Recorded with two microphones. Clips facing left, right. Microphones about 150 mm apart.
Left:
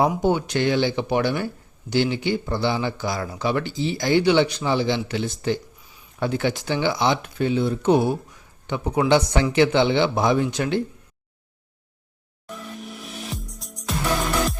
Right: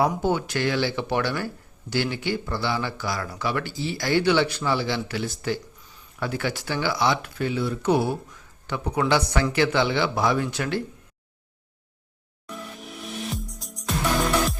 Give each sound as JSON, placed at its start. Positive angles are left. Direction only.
{"t": 0.2, "sound": "speech", "side_deg": 15}
{"t": 13.3, "sound": "music", "side_deg": 0}